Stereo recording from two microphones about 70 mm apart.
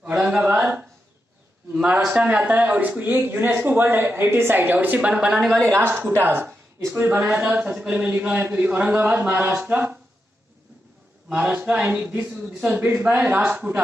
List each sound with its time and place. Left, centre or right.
0.1 s a sound: right
1.8 s a sound: centre
2.0 s speech: right
5.3 s speech: centre
5.6 s a man's voice: right
11.3 s speech: right
11.8 s a man's voice: right